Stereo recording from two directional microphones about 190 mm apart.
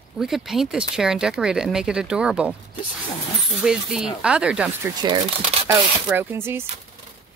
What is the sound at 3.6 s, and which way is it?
Speech, 5° right (ahead or behind).